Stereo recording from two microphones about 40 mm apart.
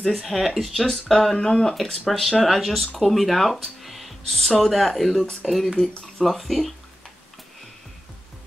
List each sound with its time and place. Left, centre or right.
0.2 s speech: centre
0.6 s speech: centre
1.3 s speech: centre
2.0 s speech: centre